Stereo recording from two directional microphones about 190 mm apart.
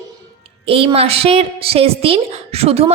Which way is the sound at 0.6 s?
30° right (ahead or behind).